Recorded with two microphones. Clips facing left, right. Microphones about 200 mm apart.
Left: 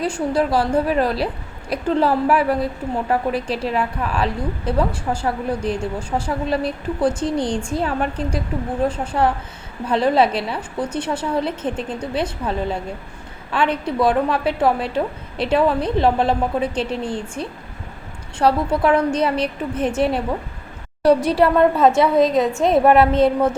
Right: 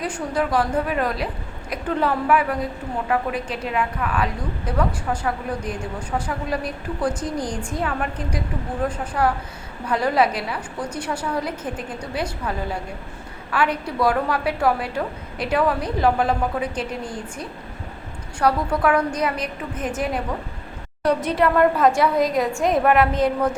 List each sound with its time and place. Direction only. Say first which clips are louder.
0.0 s a woman's voice: left 4 dB; 30° left (ahead or behind)
21.2 s a woman's voice: left 3 dB; 30° left (ahead or behind)